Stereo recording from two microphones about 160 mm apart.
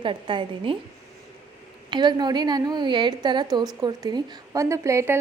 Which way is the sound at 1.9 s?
30° right (ahead or behind).